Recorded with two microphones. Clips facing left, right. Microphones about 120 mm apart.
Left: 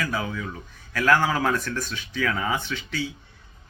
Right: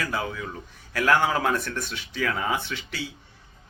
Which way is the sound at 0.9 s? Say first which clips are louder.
Left 1 dB; 25° right (ahead or behind).